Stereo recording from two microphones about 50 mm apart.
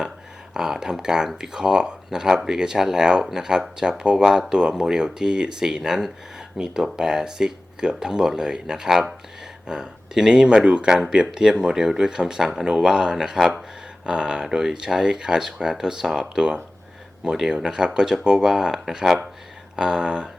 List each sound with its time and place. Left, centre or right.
0.5 s speech: centre